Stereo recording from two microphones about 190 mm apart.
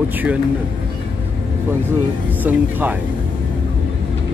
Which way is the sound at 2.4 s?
10° right (ahead or behind).